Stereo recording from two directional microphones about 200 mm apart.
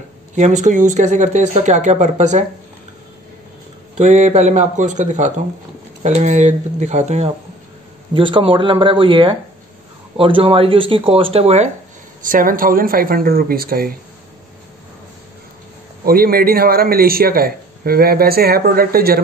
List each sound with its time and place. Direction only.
0.4 s speech: 35° right (ahead or behind)
4.0 s speech: 35° right (ahead or behind)
12.2 s speech: 45° right (ahead or behind)
16.1 s speech: 45° right (ahead or behind)